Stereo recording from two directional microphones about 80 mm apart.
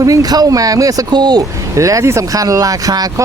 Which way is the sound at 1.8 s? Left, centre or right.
Right.